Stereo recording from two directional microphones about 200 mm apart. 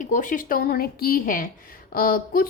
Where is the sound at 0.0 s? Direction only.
40° left (ahead or behind).